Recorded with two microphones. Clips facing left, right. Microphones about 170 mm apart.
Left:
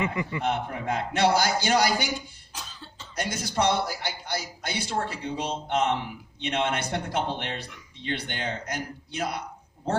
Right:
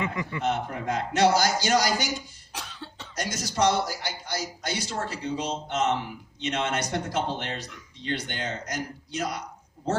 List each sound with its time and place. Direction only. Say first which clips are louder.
0.0 s speech: left 2 dB; 20° left (ahead or behind)
0.4 s a man's voice: right 2 dB; 55° left (ahead or behind)
2.5 s cough: right 5 dB; 65° right (ahead or behind)
3.2 s a man's voice: even; 55° left (ahead or behind)